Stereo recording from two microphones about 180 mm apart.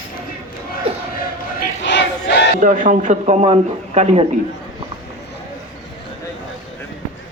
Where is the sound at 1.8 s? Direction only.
75° left (ahead or behind).